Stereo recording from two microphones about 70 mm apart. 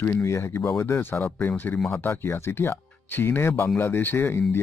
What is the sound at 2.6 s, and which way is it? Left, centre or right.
Speech, left.